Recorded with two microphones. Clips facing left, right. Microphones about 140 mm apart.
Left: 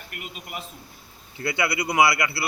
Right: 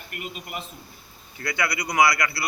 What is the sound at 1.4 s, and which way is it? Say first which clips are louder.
A man's voice: left 2 dB; 25° left (ahead or behind).